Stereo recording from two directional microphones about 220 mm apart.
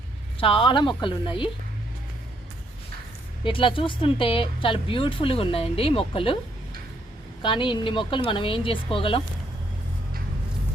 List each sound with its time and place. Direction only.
0.3 s speech: 25° left (ahead or behind)
3.4 s speech: 25° left (ahead or behind)
7.4 s speech: 20° left (ahead or behind)